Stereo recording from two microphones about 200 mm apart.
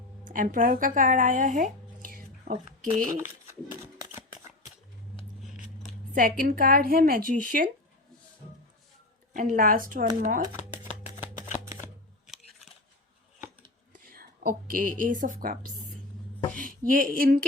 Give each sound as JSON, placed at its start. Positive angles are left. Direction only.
{"t": 0.3, "sound": "speech", "side_deg": -45}
{"t": 5.4, "sound": "scissors", "side_deg": -5}
{"t": 6.1, "sound": "a woman's voice", "side_deg": -45}
{"t": 9.3, "sound": "a woman's voice", "side_deg": -45}
{"t": 10.8, "sound": "shuffling cards", "side_deg": 35}
{"t": 12.2, "sound": "scissors", "side_deg": 0}
{"t": 13.9, "sound": "a woman's voice", "side_deg": -45}
{"t": 16.6, "sound": "a sound", "side_deg": -45}